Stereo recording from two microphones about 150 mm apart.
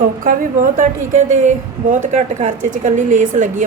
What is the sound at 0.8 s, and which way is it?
A woman's voice, 55° right (ahead or behind).